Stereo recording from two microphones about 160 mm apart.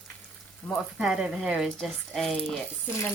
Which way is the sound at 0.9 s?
5° right (ahead or behind).